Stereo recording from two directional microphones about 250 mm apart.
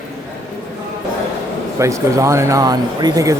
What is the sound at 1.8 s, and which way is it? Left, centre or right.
Speech, centre.